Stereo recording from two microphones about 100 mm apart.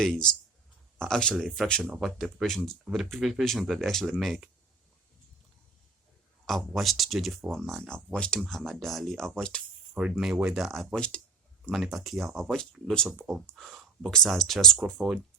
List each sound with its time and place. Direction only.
0.0 s speech: 5° left (ahead or behind)
6.4 s speech: centre (ahead or behind)
9.9 s speech: 5° right (ahead or behind)